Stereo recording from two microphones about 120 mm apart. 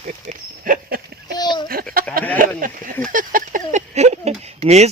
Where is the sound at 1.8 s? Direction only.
15° left (ahead or behind).